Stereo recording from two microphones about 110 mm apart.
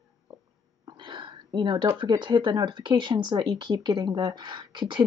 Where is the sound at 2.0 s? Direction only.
45° right (ahead or behind).